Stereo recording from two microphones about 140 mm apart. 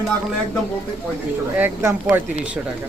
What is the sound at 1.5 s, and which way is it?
Speech, 15° right (ahead or behind).